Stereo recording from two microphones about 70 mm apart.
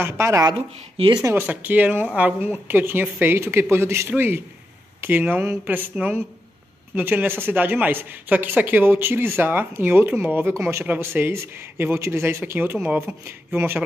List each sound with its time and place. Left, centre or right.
0.0 s speech: right
1.4 s speech: right